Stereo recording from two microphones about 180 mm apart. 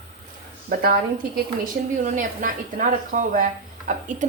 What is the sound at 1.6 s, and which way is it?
A woman's voice, 45° right (ahead or behind).